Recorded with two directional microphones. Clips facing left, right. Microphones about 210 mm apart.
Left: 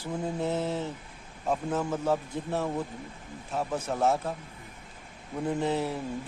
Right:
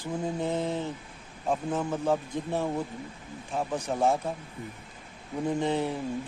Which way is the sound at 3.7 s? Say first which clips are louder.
Right 1 dB; 5° right (ahead or behind).